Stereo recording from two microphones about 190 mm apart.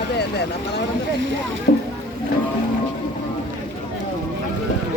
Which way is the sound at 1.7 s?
45° left (ahead or behind).